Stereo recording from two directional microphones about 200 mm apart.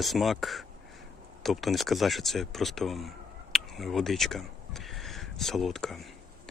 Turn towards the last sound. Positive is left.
turn(degrees=0)  # may be behind; listen again after turning